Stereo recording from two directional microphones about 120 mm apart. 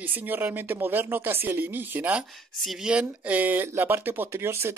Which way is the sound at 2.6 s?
Centre (ahead or behind).